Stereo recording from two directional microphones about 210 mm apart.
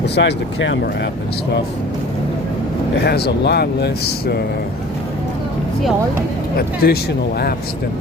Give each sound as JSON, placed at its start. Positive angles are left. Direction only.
{"t": 0.0, "sound": "speech", "side_deg": 55}
{"t": 3.0, "sound": "speech", "side_deg": 50}
{"t": 6.6, "sound": "speech", "side_deg": 45}